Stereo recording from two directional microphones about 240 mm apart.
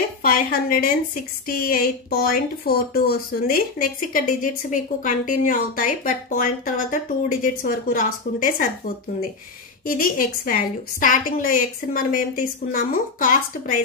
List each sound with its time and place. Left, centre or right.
0.2 s a woman's voice: left